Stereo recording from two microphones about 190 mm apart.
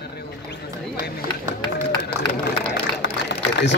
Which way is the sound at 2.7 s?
65° left (ahead or behind).